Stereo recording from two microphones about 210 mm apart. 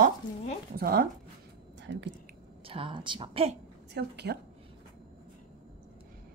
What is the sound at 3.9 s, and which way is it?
Speech, 50° right (ahead or behind).